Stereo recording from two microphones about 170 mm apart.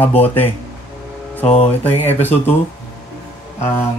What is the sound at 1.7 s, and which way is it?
Speech, 10° left (ahead or behind).